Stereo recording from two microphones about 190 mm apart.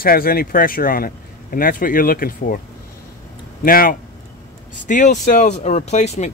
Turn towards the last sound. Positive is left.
turn(degrees=40)  # may be behind; listen again after turning